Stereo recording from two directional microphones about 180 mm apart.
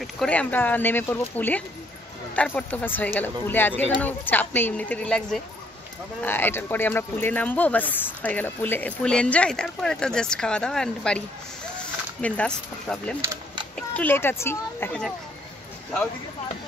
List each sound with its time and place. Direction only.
0.0 s speech: 5° left (ahead or behind)
13.2 s a sound: 15° right (ahead or behind)
13.7 s speech: 10° left (ahead or behind)